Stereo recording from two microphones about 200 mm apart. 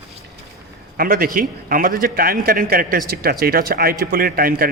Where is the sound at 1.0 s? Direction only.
45° right (ahead or behind).